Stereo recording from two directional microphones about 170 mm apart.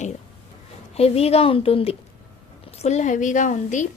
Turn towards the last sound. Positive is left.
turn(degrees=45)  # may be behind; listen again after turning